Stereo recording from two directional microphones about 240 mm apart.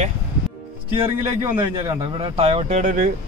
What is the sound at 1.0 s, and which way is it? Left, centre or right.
A man's voice, centre.